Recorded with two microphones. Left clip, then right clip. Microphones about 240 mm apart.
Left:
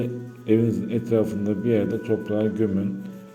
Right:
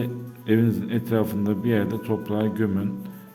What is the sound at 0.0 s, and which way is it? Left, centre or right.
Speech, right.